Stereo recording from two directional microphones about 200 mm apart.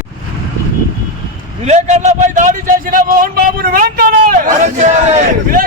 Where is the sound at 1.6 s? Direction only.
35° right (ahead or behind).